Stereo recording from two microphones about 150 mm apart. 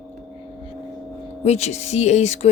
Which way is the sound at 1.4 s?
45° left (ahead or behind).